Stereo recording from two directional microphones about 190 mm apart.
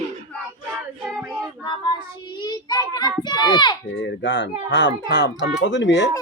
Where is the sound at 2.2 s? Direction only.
20° left (ahead or behind).